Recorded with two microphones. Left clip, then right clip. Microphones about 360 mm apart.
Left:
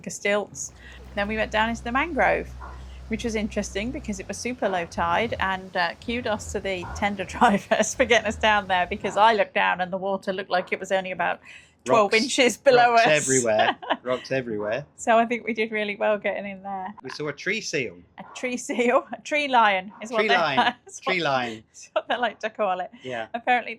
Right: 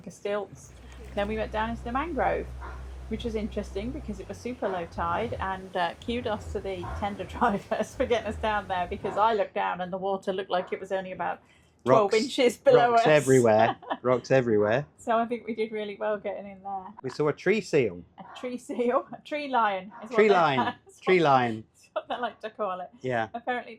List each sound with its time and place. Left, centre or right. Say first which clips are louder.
0.2 s speech: left 7 dB; left
1.1 s speech: left 5 dB; centre
12.4 s speech: left 2 dB; centre
13.1 s speech: right 1 dB; right
15.0 s speech: left 10 dB; left
17.1 s speech: right 4 dB; right
18.3 s speech: left 5 dB; left
20.1 s speech: left 1 dB; right
21.9 s speech: left 7 dB; left
23.0 s speech: right 9 dB; right
23.3 s speech: left 9 dB; left